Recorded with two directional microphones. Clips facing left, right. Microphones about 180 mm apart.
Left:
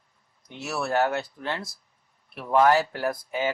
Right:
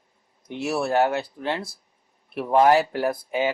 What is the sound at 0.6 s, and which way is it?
Speech, 25° right (ahead or behind).